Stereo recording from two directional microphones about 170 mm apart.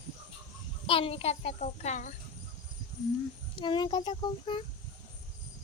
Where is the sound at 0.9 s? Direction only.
35° left (ahead or behind).